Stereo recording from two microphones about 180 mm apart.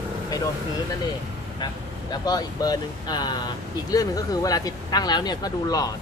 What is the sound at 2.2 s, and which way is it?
Speech, 20° left (ahead or behind).